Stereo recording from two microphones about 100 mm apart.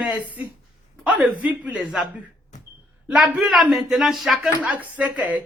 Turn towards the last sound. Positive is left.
turn(degrees=-15)  # may be behind; listen again after turning